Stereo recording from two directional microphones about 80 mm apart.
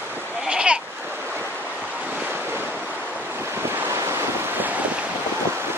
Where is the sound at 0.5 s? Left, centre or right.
Centre.